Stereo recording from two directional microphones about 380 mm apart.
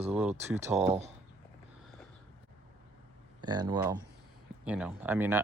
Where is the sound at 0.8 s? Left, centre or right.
Centre.